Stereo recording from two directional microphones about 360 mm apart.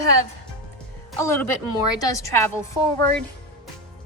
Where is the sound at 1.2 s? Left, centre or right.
Centre.